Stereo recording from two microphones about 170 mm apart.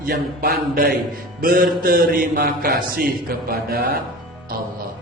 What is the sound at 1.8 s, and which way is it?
A man's voice, 60° right (ahead or behind).